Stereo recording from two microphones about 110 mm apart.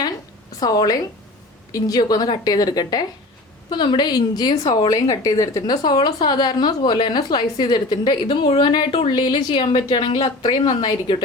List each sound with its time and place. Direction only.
0.6 s a woman's voice: 35° left (ahead or behind)
8.9 s a woman's voice: 60° left (ahead or behind)
9.1 s a woman's voice: 40° left (ahead or behind)